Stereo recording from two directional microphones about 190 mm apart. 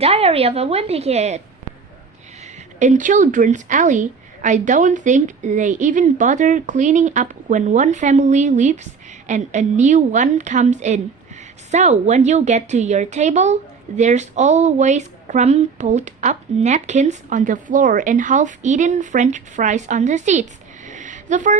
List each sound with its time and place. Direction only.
0.0 s a woman's voice: 30° right (ahead or behind)
2.4 s a woman's voice: 40° right (ahead or behind)